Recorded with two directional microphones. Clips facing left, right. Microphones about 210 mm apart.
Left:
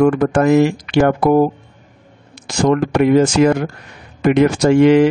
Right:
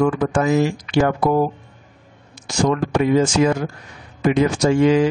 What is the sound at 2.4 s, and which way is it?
Speech, 60° left (ahead or behind).